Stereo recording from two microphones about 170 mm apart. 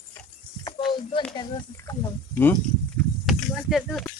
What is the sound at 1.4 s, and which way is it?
Speech, 20° left (ahead or behind).